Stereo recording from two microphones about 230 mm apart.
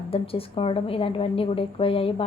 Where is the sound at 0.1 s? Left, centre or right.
Left.